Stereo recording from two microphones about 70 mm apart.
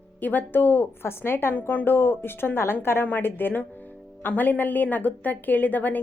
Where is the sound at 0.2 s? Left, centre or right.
Left.